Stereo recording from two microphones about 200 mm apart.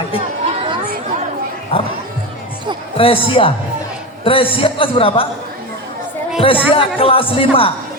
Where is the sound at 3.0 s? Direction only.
25° left (ahead or behind).